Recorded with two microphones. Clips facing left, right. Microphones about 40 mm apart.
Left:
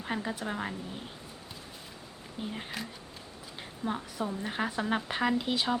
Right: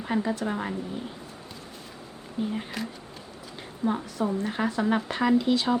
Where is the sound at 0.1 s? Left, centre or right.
Centre.